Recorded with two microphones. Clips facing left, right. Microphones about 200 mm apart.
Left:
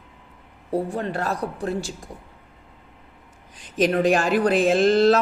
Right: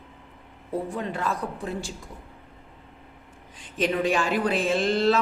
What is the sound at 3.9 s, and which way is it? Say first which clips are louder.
A man's voice: left 4 dB; 50° left (ahead or behind).